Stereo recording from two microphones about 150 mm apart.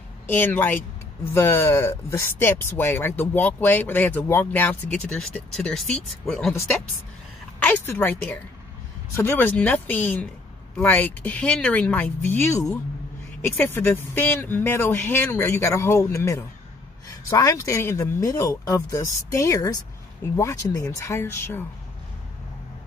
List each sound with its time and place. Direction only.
0.3 s speech: 10° left (ahead or behind)
7.6 s speech: 15° left (ahead or behind)